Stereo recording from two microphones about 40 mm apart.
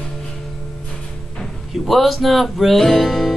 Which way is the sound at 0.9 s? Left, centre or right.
Left.